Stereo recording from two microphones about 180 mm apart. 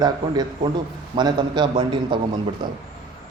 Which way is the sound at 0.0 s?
25° right (ahead or behind).